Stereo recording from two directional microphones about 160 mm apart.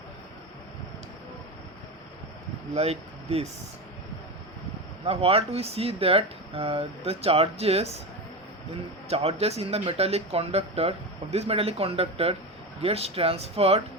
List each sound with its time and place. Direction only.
2.7 s speech: 40° right (ahead or behind)
5.0 s speech: 35° right (ahead or behind)
9.0 s speech: 40° right (ahead or behind)